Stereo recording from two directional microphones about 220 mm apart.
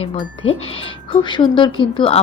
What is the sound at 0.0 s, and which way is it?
Speech, 25° left (ahead or behind).